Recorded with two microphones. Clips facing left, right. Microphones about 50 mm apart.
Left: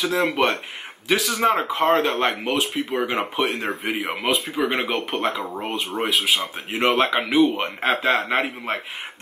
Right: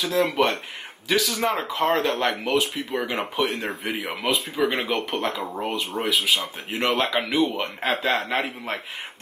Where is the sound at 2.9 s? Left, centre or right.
Centre.